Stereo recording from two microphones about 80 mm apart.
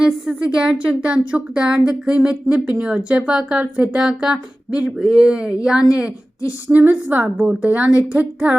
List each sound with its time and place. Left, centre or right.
0.0 s speech: centre
6.7 s speech: right